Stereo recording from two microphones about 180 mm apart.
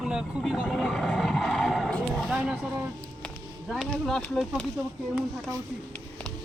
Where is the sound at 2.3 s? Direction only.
5° right (ahead or behind).